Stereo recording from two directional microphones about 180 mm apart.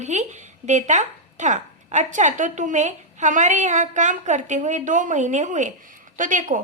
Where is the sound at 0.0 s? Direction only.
40° right (ahead or behind).